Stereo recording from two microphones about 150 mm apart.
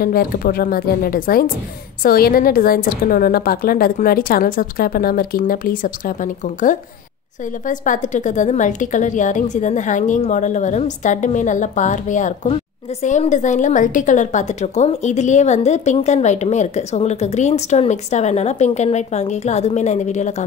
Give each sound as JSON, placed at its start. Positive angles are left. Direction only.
{"t": 0.0, "sound": "a woman's voice", "side_deg": 80}